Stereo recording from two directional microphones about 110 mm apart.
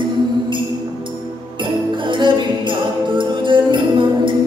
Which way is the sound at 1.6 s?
45° right (ahead or behind).